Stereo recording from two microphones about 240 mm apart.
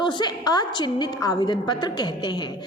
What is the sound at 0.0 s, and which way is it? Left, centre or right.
A woman's voice, centre.